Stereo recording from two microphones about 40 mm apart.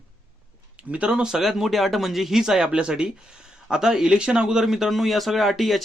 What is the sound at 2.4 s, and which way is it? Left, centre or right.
A man's voice, centre.